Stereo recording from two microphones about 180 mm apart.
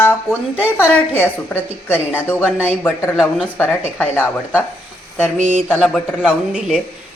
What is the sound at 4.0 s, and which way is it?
Speech, 10° left (ahead or behind).